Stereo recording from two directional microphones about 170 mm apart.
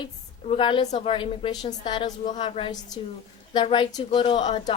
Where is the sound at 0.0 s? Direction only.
30° left (ahead or behind).